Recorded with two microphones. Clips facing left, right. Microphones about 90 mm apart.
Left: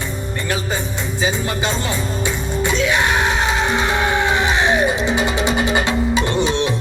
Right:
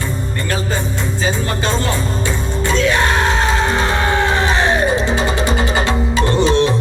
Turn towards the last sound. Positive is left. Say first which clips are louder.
# right 4 dB
turn(degrees=20)  # may be behind; listen again after turning